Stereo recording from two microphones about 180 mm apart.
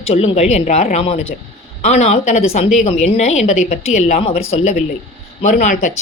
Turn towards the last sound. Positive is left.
turn(degrees=45)  # may be behind; listen again after turning